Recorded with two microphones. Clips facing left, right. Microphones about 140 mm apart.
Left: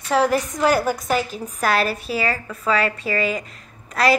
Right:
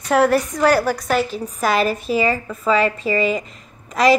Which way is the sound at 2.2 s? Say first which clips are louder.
Right 4 dB; 10° right (ahead or behind).